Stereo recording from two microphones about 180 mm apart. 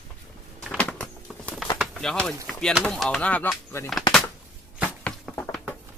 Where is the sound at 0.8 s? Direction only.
5° left (ahead or behind).